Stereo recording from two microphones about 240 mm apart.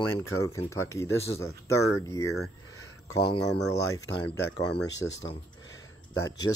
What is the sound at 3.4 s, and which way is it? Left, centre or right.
Speech, left.